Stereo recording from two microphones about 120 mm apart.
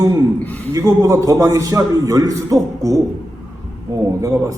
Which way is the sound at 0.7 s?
30° right (ahead or behind).